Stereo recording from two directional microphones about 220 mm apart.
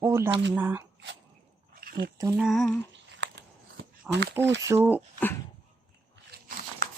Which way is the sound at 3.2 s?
55° right (ahead or behind).